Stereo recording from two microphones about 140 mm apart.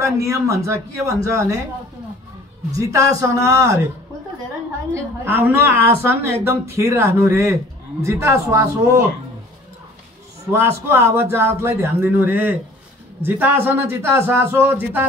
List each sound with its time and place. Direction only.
0.0 s speech: 20° right (ahead or behind)
2.7 s speech: 25° right (ahead or behind)
4.9 s a woman's voice: 15° right (ahead or behind)
10.5 s a woman's voice: 20° right (ahead or behind)